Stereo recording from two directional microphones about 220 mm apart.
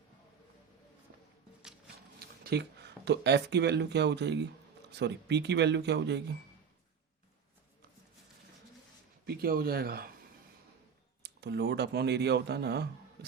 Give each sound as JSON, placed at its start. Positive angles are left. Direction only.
{"t": 2.1, "sound": "speech", "side_deg": -45}
{"t": 9.2, "sound": "speech", "side_deg": -45}
{"t": 11.2, "sound": "speech", "side_deg": -50}